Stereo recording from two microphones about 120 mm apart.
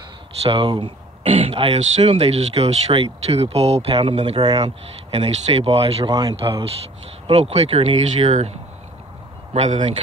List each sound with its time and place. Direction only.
0.4 s speech: 45° right (ahead or behind)
6.0 s speech: 40° right (ahead or behind)
7.2 s speech: 60° right (ahead or behind)
9.5 s speech: 75° right (ahead or behind)